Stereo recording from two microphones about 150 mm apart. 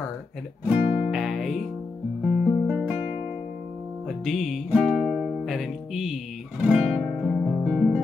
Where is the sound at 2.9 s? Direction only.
40° left (ahead or behind).